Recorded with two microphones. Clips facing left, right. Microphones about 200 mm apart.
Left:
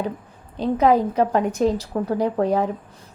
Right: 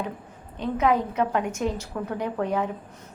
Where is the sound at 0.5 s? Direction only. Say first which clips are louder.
Left 5 dB; 35° left (ahead or behind).